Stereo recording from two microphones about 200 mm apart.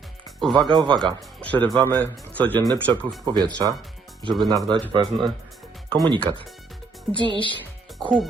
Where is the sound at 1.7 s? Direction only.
5° left (ahead or behind).